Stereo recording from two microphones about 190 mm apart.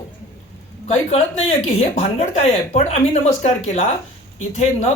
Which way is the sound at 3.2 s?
35° left (ahead or behind).